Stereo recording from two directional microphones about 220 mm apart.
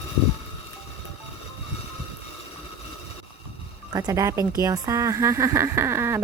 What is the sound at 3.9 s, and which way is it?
Speech, 15° right (ahead or behind).